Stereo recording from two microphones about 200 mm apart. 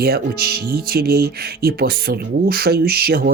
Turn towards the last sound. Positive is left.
turn(degrees=-50)  # may be behind; listen again after turning